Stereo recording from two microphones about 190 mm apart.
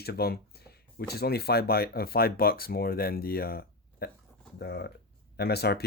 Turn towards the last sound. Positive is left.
turn(degrees=55)  # may be behind; listen again after turning